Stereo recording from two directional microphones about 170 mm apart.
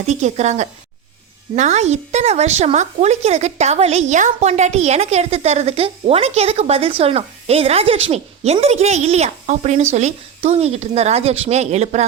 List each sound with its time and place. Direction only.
0.0 s a woman's voice: 45° right (ahead or behind)